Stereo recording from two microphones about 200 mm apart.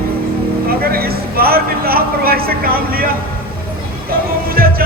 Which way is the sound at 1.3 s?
50° right (ahead or behind).